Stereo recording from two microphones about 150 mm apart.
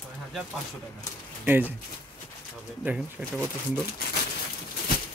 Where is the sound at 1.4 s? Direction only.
15° right (ahead or behind).